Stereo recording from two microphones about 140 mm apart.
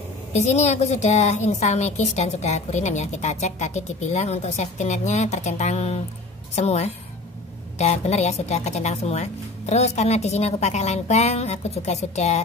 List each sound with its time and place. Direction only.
0.3 s a woman's voice: 55° left (ahead or behind)